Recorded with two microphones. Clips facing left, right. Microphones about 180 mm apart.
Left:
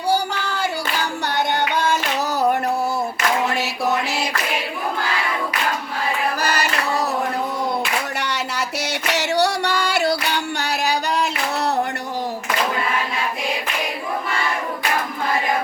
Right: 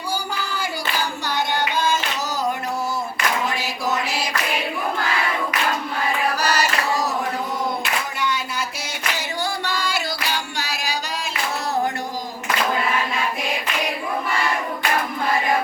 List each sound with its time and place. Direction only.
1.7 s a sound: 60° left (ahead or behind)
6.4 s music: 55° left (ahead or behind)
9.1 s music: 75° left (ahead or behind)